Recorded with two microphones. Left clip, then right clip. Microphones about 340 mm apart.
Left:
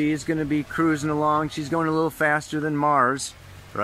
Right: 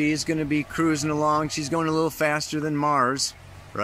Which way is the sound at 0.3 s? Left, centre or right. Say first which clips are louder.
Left 1 dB; centre.